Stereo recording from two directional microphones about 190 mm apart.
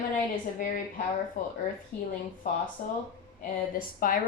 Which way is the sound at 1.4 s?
45° left (ahead or behind).